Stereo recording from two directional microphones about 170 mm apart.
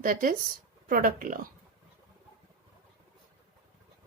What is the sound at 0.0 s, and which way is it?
Speech, 55° right (ahead or behind).